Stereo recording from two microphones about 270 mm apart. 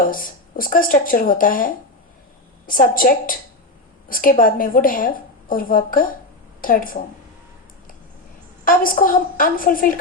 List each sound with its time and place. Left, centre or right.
0.0 s a woman's voice: left
8.6 s a woman's voice: left